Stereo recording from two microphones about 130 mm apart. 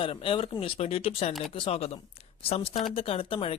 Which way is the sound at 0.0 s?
45° left (ahead or behind).